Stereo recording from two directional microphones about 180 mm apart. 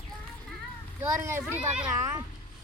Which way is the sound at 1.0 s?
15° right (ahead or behind).